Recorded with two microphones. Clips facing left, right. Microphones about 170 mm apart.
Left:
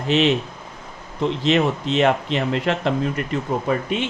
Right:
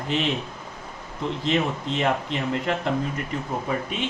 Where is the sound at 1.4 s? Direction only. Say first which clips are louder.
Left 5 dB; 80° left.